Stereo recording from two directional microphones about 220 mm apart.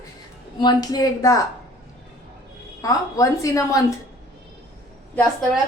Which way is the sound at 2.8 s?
15° left (ahead or behind).